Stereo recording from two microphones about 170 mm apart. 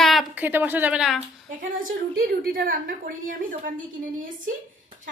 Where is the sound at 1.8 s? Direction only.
60° right (ahead or behind).